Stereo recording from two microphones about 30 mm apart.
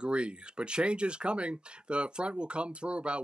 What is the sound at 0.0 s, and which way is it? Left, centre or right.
Speech, right.